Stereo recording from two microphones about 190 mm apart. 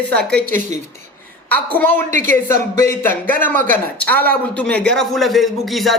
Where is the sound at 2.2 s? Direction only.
15° left (ahead or behind).